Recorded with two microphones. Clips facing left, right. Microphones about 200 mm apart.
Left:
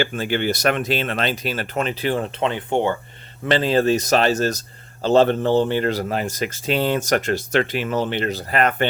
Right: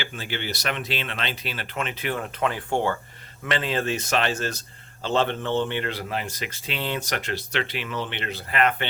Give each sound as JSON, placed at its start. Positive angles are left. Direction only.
{"t": 0.0, "sound": "speech", "side_deg": 50}
{"t": 3.4, "sound": "speech", "side_deg": 35}